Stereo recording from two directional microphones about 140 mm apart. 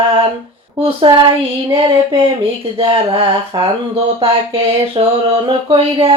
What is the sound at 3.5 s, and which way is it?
Speech, 30° right (ahead or behind).